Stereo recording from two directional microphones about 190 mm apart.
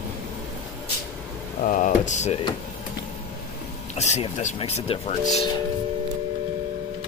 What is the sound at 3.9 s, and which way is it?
Speech, 35° left (ahead or behind).